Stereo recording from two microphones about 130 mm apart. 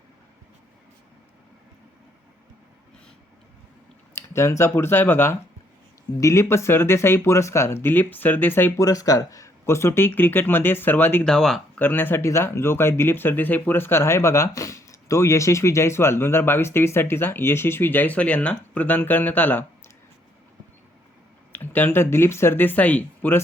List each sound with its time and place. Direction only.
4.1 s speech: 20° left (ahead or behind)
11.3 s speech: 5° left (ahead or behind)
11.8 s speech: 15° left (ahead or behind)
21.5 s speech: 15° left (ahead or behind)